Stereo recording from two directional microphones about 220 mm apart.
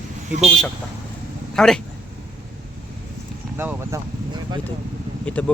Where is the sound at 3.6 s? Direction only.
10° right (ahead or behind).